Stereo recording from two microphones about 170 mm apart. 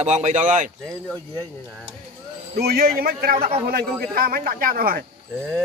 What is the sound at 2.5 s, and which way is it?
A man's voice, 65° right (ahead or behind).